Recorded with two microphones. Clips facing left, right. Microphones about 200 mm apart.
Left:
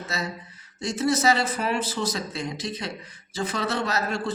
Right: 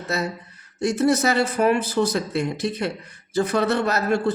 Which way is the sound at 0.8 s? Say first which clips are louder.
Right 5 dB; 60° right (ahead or behind).